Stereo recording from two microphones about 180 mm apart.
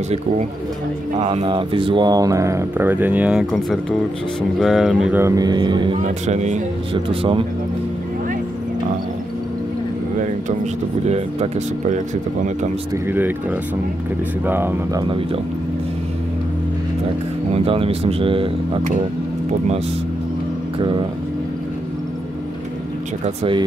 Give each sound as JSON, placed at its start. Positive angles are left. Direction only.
{"t": 1.2, "sound": "speech", "side_deg": -30}
{"t": 5.2, "sound": "speech", "side_deg": -20}
{"t": 6.2, "sound": "speech", "side_deg": -40}
{"t": 6.9, "sound": "speech", "side_deg": -30}
{"t": 11.1, "sound": "speech", "side_deg": -35}
{"t": 13.1, "sound": "speech", "side_deg": -10}
{"t": 15.0, "sound": "speech", "side_deg": -30}
{"t": 17.5, "sound": "speech", "side_deg": -30}
{"t": 23.2, "sound": "speech", "side_deg": -30}